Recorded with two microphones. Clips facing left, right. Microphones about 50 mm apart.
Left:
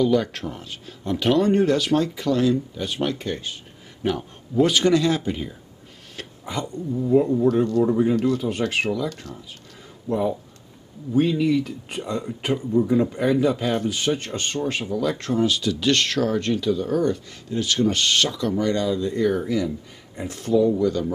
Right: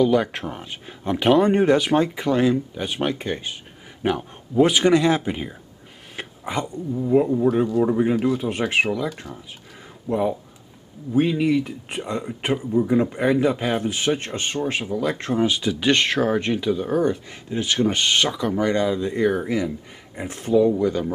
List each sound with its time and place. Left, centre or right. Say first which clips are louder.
0.0 s speech: right 1 dB; centre
6.2 s a sound: right 3 dB; right
7.0 s speech: even; centre
7.8 s speech: even; right
13.5 s speech: even; centre
15.0 s speech: even; right